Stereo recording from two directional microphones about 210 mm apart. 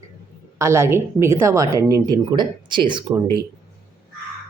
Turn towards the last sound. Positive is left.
turn(degrees=-20)  # may be behind; listen again after turning